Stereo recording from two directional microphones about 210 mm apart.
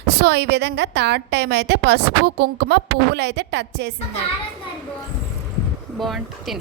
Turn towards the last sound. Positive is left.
turn(degrees=0)  # may be behind; listen again after turning